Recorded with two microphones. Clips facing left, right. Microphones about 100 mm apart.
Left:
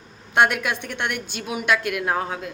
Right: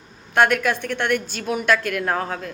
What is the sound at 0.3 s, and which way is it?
A woman's voice, 20° left (ahead or behind).